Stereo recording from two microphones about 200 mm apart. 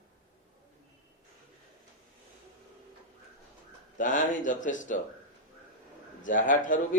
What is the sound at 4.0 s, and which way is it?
A man's voice, 40° left (ahead or behind).